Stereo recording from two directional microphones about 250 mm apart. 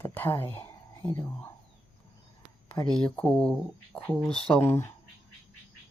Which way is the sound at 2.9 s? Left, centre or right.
Centre.